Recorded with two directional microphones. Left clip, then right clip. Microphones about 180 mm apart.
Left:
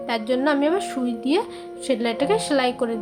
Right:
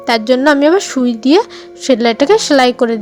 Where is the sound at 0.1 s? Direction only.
45° right (ahead or behind).